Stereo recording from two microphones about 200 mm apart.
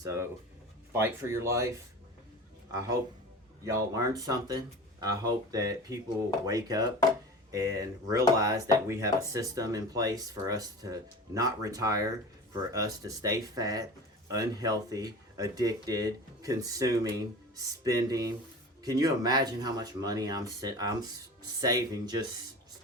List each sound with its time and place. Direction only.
0.0 s speech: 15° right (ahead or behind)
3.6 s speech: 15° right (ahead or behind)